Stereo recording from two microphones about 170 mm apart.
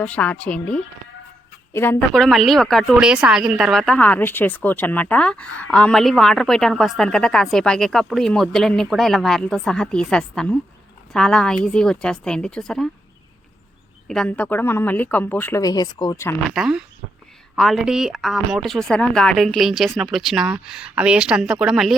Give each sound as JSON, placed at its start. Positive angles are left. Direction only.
{"t": 0.0, "sound": "a woman's voice", "side_deg": 10}
{"t": 14.1, "sound": "a woman's voice", "side_deg": 5}
{"t": 16.6, "sound": "a woman's voice", "side_deg": -5}